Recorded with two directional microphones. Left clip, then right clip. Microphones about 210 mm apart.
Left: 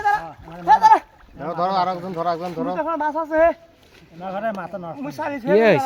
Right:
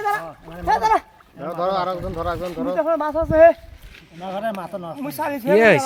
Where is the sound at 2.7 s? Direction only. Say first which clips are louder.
Right 3 dB; 10° left (ahead or behind).